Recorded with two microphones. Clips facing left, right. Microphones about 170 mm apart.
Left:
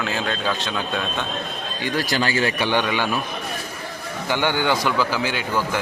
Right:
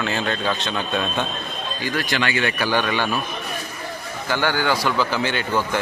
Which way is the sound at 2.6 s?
20° left (ahead or behind).